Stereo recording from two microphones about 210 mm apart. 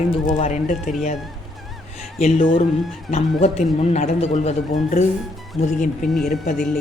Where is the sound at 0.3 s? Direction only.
35° left (ahead or behind).